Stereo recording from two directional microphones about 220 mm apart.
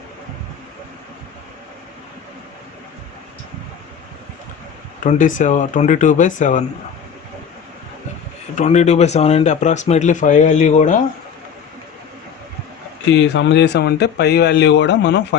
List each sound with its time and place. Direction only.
5.0 s speech: 35° left (ahead or behind)
8.5 s speech: 30° left (ahead or behind)
13.3 s speech: 55° left (ahead or behind)